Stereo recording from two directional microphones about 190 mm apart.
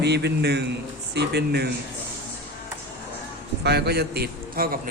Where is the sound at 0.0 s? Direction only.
65° right (ahead or behind).